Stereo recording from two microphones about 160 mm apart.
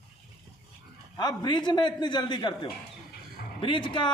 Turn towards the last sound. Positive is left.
turn(degrees=30)  # may be behind; listen again after turning